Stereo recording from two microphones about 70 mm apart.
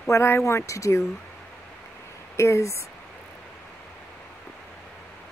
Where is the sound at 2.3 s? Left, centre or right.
Left.